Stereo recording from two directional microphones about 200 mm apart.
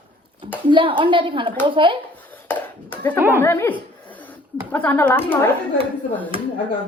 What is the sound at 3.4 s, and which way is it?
A woman's voice, 10° left (ahead or behind).